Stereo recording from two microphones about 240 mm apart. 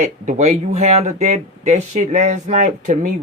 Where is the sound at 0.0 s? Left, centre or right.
Right.